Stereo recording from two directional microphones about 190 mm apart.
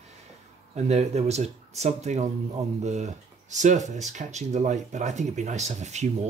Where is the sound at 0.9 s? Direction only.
35° right (ahead or behind).